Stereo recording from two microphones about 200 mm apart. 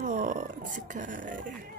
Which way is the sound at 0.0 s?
40° right (ahead or behind).